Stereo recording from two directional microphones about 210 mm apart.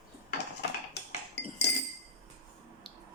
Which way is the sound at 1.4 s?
50° left (ahead or behind).